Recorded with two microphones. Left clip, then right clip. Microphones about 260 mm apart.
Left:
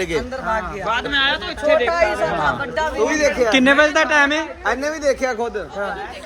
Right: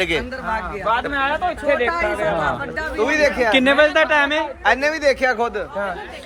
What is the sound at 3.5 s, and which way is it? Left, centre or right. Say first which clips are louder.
Speech: left 1 dB; centre.